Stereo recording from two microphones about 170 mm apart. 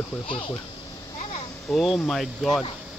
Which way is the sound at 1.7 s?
Centre (ahead or behind).